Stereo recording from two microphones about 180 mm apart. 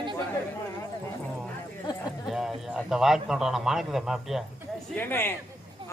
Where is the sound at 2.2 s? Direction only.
Centre (ahead or behind).